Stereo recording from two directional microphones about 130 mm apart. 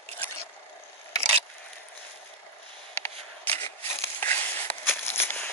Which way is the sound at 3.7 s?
20° left (ahead or behind).